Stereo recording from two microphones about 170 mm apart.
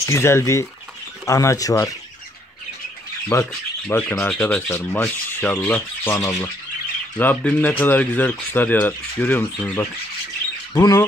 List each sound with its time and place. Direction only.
0.0 s speech: 15° left (ahead or behind)
3.3 s speech: 20° left (ahead or behind)